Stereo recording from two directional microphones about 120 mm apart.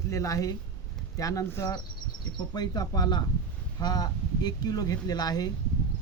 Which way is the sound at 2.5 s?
35° left (ahead or behind).